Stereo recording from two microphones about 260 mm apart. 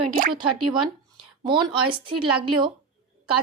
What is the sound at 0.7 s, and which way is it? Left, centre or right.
Speech, centre.